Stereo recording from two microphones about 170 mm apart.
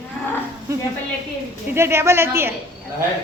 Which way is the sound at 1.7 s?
15° right (ahead or behind).